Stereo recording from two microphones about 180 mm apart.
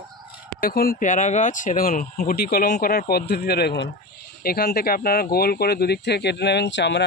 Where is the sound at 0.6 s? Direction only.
55° left (ahead or behind).